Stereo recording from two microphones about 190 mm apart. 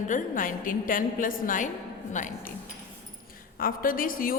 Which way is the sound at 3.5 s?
50° left (ahead or behind).